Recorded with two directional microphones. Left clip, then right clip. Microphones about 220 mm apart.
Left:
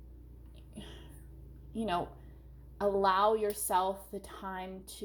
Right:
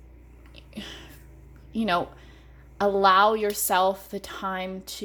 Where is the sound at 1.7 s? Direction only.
35° right (ahead or behind).